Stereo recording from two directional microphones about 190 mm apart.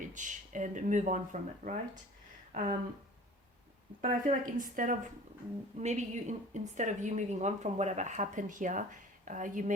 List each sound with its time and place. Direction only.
0.1 s a woman's voice: 40° right (ahead or behind)
2.5 s a sound: 40° right (ahead or behind)
4.0 s a woman's voice: 45° right (ahead or behind)